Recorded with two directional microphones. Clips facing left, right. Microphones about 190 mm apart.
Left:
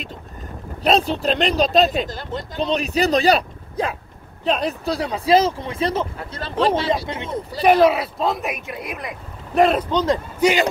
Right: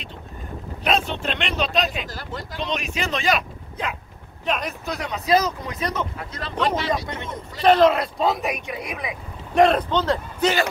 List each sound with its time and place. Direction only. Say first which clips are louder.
0.8 s speech: left 5 dB; 35° left (ahead or behind)
2.0 s speech: left 4 dB; 20° left (ahead or behind)
2.6 s speech: left 8 dB; 35° left (ahead or behind)
7.6 s speech: left 1 dB; 10° left (ahead or behind)